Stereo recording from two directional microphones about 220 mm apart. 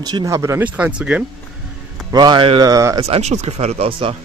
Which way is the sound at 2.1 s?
20° right (ahead or behind).